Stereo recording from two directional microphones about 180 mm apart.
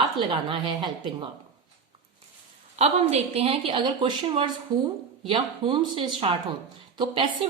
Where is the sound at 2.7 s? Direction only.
35° right (ahead or behind).